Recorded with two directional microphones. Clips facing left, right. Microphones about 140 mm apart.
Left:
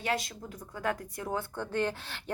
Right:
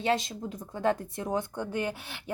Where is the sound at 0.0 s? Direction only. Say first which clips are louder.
Right 5 dB; 25° right (ahead or behind).